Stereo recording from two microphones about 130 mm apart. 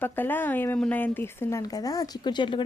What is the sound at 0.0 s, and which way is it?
Speech, 15° left (ahead or behind).